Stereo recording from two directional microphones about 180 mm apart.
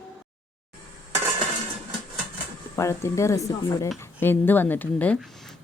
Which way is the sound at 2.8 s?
15° left (ahead or behind).